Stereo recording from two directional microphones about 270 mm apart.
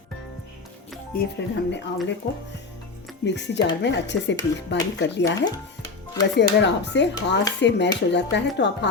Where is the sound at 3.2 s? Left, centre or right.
Left.